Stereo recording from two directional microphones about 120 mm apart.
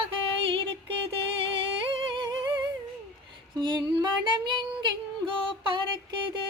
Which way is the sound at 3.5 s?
40° right (ahead or behind).